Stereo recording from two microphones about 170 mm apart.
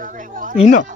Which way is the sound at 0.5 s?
45° left (ahead or behind).